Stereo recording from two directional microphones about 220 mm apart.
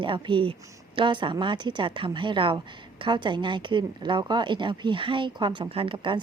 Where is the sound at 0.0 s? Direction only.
20° right (ahead or behind).